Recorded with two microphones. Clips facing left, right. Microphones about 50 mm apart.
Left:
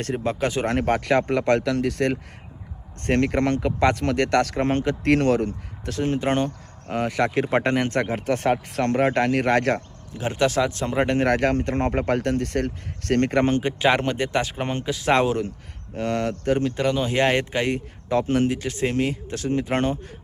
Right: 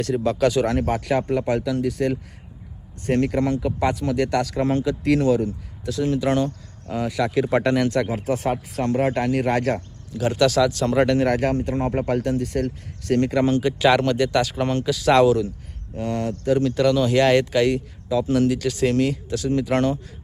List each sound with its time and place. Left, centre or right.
0.3 s speech: left
0.6 s speech: left
7.3 s speech: left
10.2 s speech: left
11.2 s speech: left
13.6 s speech: left
16.0 s speech: left
16.6 s speech: left
18.1 s speech: left
18.4 s speech: left